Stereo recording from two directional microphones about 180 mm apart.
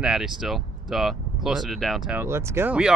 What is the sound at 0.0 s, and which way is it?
Speech, 5° right (ahead or behind).